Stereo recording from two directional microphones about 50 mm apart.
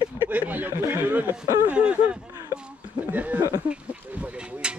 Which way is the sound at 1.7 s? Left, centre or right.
Right.